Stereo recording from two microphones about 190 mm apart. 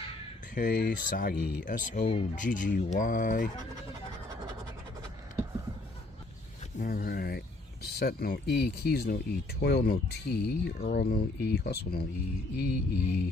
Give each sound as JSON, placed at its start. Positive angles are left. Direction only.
{"t": 0.6, "sound": "speech", "side_deg": 55}
{"t": 6.8, "sound": "speech", "side_deg": 50}